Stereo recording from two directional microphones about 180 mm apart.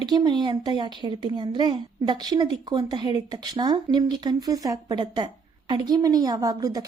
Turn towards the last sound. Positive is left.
turn(degrees=-20)  # may be behind; listen again after turning